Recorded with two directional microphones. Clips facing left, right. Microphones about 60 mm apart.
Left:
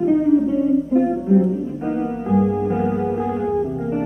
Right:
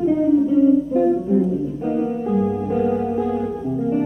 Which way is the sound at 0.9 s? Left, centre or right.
Left.